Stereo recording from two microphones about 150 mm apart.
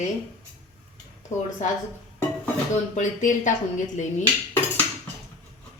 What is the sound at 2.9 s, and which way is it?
Speech, 55° left (ahead or behind).